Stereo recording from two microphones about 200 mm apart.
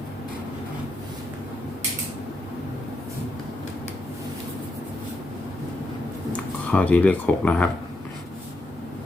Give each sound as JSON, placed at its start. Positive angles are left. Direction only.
{"t": 6.3, "sound": "speech", "side_deg": 5}